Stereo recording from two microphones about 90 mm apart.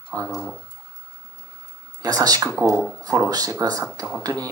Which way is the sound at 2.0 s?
45° right (ahead or behind).